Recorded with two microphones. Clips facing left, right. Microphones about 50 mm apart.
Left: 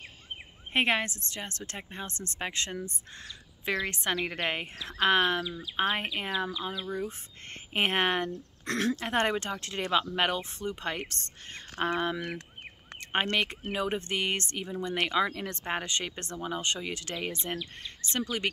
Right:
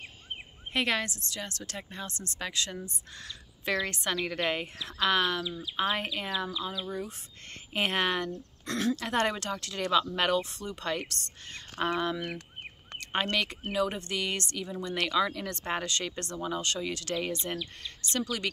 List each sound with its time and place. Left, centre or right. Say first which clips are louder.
0.7 s speech: left 2 dB; left
3.6 s speech: even; centre; by 5.9 s left
5.9 s speech: even; left
8.6 s speech: left 1 dB; left
8.9 s speech: left 1 dB; left